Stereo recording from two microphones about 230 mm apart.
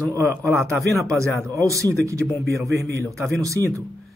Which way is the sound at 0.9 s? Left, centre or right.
Right.